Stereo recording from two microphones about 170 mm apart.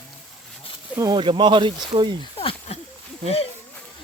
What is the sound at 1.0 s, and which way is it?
Speech, 25° right (ahead or behind).